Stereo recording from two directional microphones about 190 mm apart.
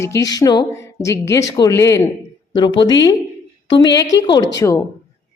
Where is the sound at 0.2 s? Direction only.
20° left (ahead or behind).